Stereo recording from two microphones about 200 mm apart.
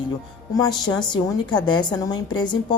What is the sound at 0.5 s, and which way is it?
A woman's voice, 20° left (ahead or behind).